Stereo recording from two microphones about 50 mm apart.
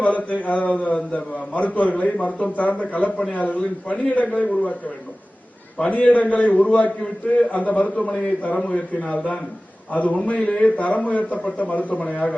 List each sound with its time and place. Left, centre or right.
0.0 s a man's voice: left
5.8 s a man's voice: left
7.9 s a man's voice: centre